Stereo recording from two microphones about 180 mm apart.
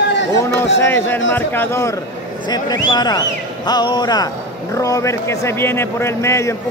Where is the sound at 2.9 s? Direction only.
20° left (ahead or behind).